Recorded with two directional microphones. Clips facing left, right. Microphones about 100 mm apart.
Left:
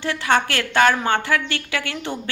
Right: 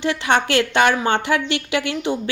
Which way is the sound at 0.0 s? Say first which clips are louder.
Right 1 dB; 20° right (ahead or behind).